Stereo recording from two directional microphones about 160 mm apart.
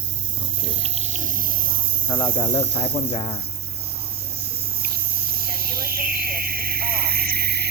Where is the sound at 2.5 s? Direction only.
35° left (ahead or behind).